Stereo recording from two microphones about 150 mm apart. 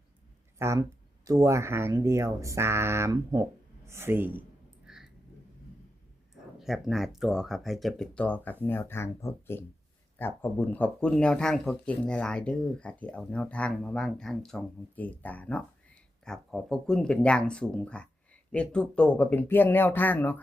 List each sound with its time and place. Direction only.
0.6 s speech: 20° right (ahead or behind)
4.9 s a sound: 5° right (ahead or behind)
6.6 s speech: centre (ahead or behind)